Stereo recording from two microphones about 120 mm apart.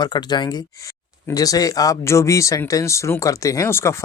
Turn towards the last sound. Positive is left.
turn(degrees=20)  # may be behind; listen again after turning